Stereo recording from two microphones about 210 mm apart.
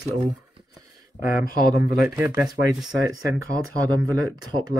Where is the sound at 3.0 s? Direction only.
15° right (ahead or behind).